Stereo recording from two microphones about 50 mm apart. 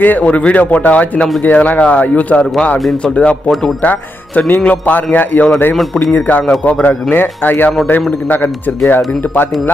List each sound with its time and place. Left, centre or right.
0.0 s speech: left